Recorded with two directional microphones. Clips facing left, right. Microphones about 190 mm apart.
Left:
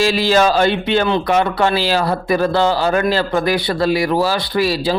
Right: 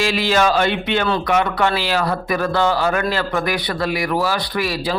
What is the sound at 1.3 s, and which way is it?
A man's voice, 30° left (ahead or behind).